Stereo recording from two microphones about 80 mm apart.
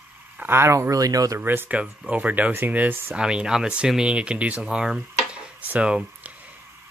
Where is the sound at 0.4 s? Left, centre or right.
Right.